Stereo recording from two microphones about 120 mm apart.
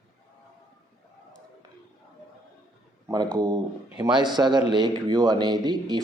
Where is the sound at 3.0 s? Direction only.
30° right (ahead or behind).